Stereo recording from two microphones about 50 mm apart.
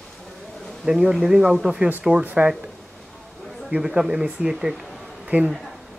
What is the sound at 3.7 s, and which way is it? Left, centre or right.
Speech, centre.